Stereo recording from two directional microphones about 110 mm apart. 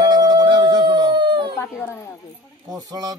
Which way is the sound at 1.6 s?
20° left (ahead or behind).